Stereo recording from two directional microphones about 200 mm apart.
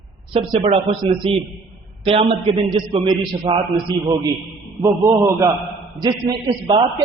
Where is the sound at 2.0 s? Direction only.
30° right (ahead or behind).